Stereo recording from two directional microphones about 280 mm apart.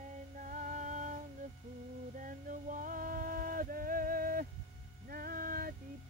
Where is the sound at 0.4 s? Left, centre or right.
Right.